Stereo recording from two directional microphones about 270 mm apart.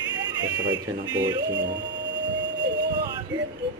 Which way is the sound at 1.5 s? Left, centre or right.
Right.